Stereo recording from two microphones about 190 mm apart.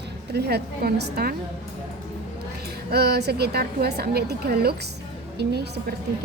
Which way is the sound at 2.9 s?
55° right (ahead or behind).